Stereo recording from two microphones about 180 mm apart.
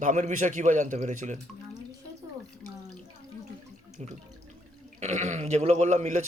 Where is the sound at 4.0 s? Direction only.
40° right (ahead or behind).